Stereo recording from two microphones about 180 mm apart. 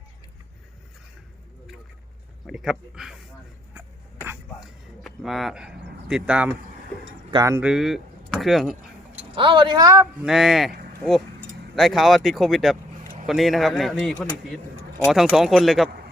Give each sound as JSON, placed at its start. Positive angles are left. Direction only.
{"t": 2.5, "sound": "speech", "side_deg": 0}
{"t": 3.8, "sound": "a sound", "side_deg": -10}
{"t": 5.0, "sound": "a sound", "side_deg": 0}
{"t": 7.3, "sound": "speech", "side_deg": -20}
{"t": 7.7, "sound": "speech", "side_deg": 0}
{"t": 9.3, "sound": "speech", "side_deg": -25}
{"t": 10.2, "sound": "speech", "side_deg": 0}
{"t": 11.7, "sound": "speech", "side_deg": 0}